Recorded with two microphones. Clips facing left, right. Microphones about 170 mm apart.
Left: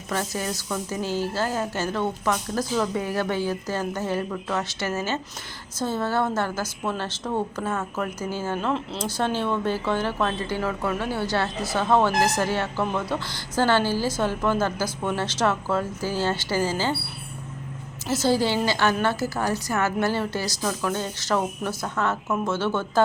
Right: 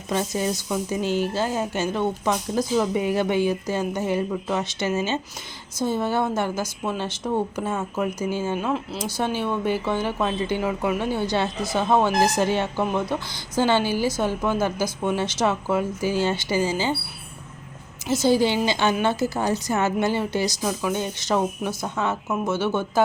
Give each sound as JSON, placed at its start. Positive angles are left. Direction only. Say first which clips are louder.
{"t": 0.1, "sound": "a woman's voice", "louder": "right 4 dB", "side_deg": -20}
{"t": 18.1, "sound": "a woman's voice", "louder": "right 2 dB", "side_deg": -15}